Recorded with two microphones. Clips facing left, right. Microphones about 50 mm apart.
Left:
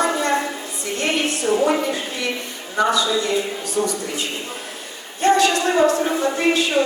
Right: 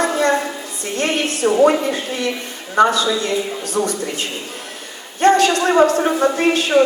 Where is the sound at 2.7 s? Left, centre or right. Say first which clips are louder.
Right 4 dB; right.